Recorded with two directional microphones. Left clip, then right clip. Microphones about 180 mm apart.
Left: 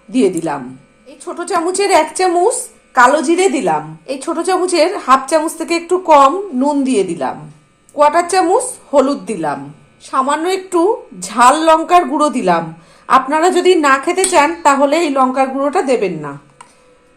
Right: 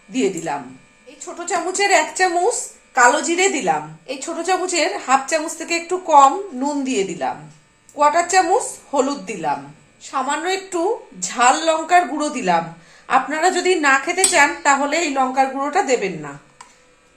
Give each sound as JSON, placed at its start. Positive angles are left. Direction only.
{"t": 0.1, "sound": "a woman's voice", "side_deg": 40}